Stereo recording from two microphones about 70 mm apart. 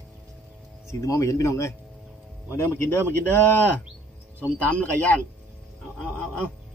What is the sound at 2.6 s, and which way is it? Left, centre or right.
Speech, left.